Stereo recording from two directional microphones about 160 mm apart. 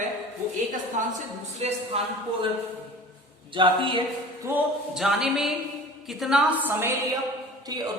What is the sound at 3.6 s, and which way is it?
Speech, 35° right (ahead or behind).